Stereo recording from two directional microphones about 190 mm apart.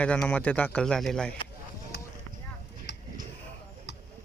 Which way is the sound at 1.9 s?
65° left (ahead or behind).